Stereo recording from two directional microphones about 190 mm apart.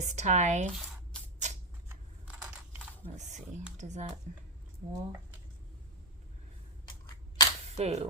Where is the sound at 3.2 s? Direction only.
40° right (ahead or behind).